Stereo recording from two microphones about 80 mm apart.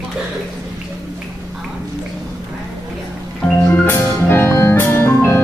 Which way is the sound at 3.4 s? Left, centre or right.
Left.